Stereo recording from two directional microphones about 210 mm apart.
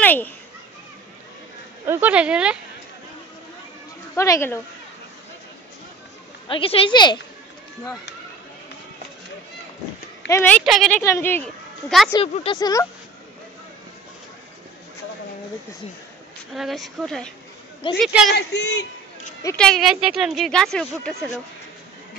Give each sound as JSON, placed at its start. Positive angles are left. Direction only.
{"t": 0.0, "sound": "a sound", "side_deg": 10}
{"t": 1.9, "sound": "speech", "side_deg": -5}
{"t": 4.1, "sound": "speech", "side_deg": 10}
{"t": 6.4, "sound": "speech", "side_deg": 25}
{"t": 10.2, "sound": "speech", "side_deg": 10}
{"t": 10.6, "sound": "speech", "side_deg": 0}
{"t": 12.1, "sound": "speech", "side_deg": 20}
{"t": 16.5, "sound": "speech", "side_deg": 0}
{"t": 18.3, "sound": "speech", "side_deg": 55}
{"t": 19.4, "sound": "speech", "side_deg": 5}